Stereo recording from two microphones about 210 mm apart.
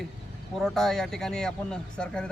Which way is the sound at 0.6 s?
Centre (ahead or behind).